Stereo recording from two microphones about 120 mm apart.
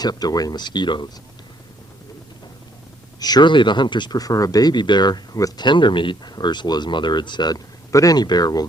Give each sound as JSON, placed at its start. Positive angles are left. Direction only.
{"t": 0.0, "sound": "speech", "side_deg": 35}
{"t": 3.2, "sound": "speech", "side_deg": 35}